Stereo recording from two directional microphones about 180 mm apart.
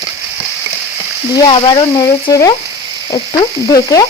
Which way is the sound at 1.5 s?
25° left (ahead or behind).